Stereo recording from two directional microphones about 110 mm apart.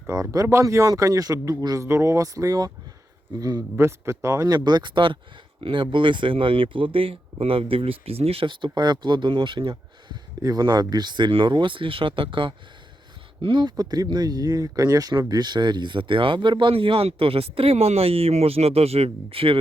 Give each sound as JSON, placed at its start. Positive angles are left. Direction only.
{"t": 0.1, "sound": "speech", "side_deg": -30}
{"t": 3.8, "sound": "speech", "side_deg": -25}